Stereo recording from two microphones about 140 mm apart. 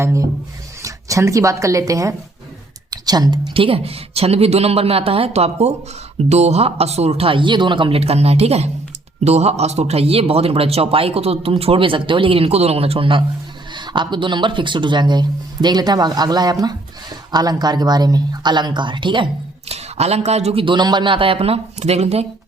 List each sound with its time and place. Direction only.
0.0 s a man's voice: 20° right (ahead or behind)
19.6 s a man's voice: 50° right (ahead or behind)